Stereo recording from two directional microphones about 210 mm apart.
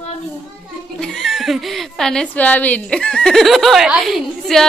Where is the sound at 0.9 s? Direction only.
Centre (ahead or behind).